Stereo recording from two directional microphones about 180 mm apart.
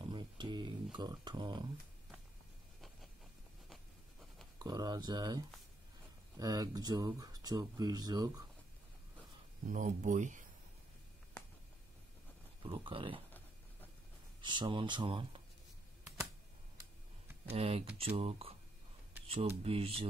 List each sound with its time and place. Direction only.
0.0 s a sound: 25° right (ahead or behind)
0.9 s speech: 25° right (ahead or behind)
4.6 s speech: 20° right (ahead or behind)
9.7 s speech: 45° right (ahead or behind)
12.6 s speech: 30° right (ahead or behind)
14.4 s speech: 25° right (ahead or behind)
17.5 s speech: 30° right (ahead or behind)